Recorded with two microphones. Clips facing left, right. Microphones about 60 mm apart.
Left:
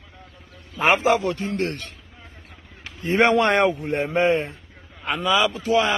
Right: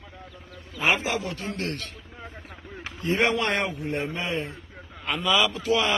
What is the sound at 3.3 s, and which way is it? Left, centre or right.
A man's voice, left.